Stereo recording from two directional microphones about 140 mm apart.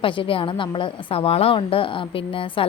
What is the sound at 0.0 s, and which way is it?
Speech, 40° left (ahead or behind).